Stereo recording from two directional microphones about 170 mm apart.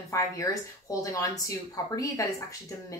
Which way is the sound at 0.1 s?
20° left (ahead or behind).